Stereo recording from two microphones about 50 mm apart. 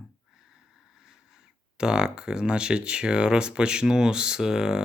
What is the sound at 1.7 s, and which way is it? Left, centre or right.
Speech, centre.